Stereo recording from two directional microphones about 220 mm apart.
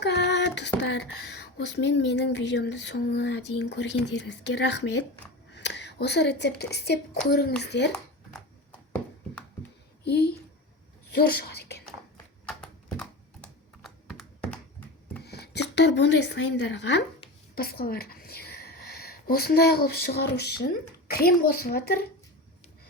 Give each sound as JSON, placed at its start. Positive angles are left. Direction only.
{"t": 0.0, "sound": "a woman's voice", "side_deg": 50}
{"t": 10.0, "sound": "speech", "side_deg": 50}
{"t": 13.4, "sound": "computer keyboard", "side_deg": 0}
{"t": 15.2, "sound": "speech", "side_deg": 50}